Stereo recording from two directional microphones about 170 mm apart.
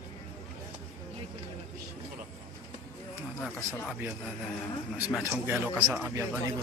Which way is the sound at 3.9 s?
5° right (ahead or behind).